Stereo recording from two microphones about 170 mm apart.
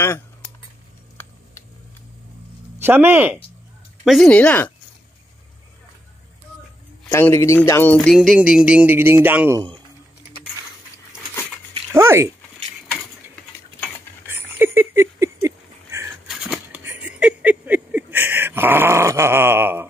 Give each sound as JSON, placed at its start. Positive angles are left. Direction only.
{"t": 2.8, "sound": "speech", "side_deg": -15}
{"t": 4.0, "sound": "speech", "side_deg": 0}
{"t": 7.1, "sound": "speech", "side_deg": 15}
{"t": 11.9, "sound": "speech", "side_deg": -15}
{"t": 14.2, "sound": "a sound", "side_deg": -10}
{"t": 16.3, "sound": "a sound", "side_deg": -5}